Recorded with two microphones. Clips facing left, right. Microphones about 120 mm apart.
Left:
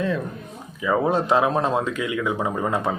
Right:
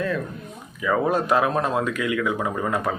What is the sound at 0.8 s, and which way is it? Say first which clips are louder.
Speech: left 1 dB; 20° left (ahead or behind).